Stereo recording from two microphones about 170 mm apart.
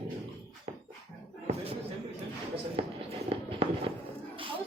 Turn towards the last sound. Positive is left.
turn(degrees=-35)  # may be behind; listen again after turning